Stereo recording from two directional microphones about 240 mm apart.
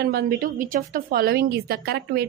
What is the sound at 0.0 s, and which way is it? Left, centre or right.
A woman's voice, right.